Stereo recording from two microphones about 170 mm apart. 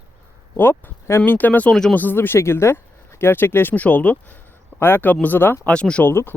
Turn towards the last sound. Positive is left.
turn(degrees=15)  # may be behind; listen again after turning